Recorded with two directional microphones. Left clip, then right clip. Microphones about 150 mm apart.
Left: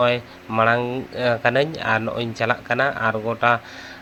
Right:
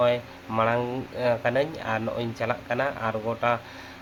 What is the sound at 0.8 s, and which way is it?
Speech, 10° left (ahead or behind).